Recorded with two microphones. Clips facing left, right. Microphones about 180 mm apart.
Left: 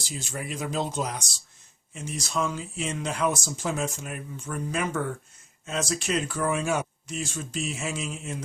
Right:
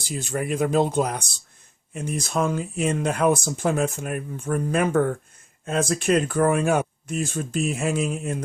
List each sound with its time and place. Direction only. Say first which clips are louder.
0.0 s speech: right 8 dB; 55° right (ahead or behind)